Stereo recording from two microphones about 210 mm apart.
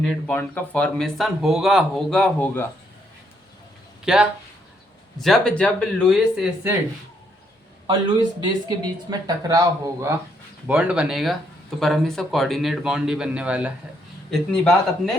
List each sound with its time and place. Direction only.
0.3 s speech: 5° left (ahead or behind)
4.0 s speech: 5° right (ahead or behind)
8.4 s speech: 20° right (ahead or behind)
10.7 s speech: 5° right (ahead or behind)